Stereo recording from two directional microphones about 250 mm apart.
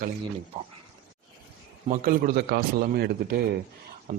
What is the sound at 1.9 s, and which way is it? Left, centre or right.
Speech, right.